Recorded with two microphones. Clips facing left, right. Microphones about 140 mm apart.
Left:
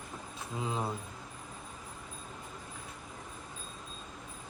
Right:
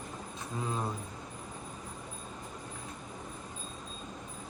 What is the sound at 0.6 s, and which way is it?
Speech, 20° left (ahead or behind).